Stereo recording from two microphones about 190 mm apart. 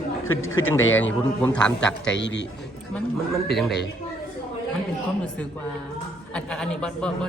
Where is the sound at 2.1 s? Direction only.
70° left (ahead or behind).